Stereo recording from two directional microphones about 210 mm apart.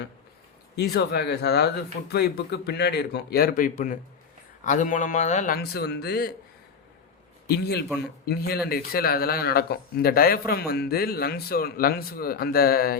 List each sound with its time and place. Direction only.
0.8 s a man's voice: 50° left (ahead or behind); by 5.5 s 35° left (ahead or behind)
5.5 s speech: 50° left (ahead or behind)
7.4 s a man's voice: 50° left (ahead or behind)